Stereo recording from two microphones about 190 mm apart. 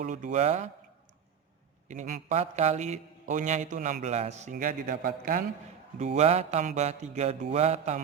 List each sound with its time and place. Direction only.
0.0 s a man's voice: 40° right (ahead or behind)
1.9 s a man's voice: 40° right (ahead or behind)
4.5 s a man's voice: 50° right (ahead or behind)
6.0 s a man's voice: 35° right (ahead or behind)